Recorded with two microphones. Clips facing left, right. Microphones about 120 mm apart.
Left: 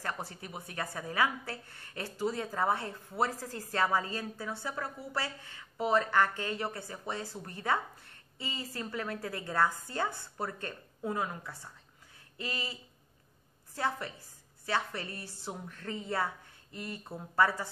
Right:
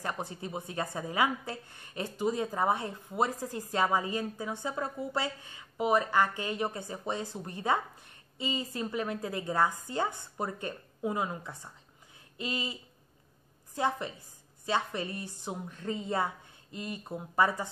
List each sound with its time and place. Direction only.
0.0 s a woman's voice: 20° right (ahead or behind)
13.7 s a woman's voice: 20° right (ahead or behind)